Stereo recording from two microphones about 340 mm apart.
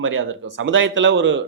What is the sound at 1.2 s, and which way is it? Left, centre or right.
Speech, right.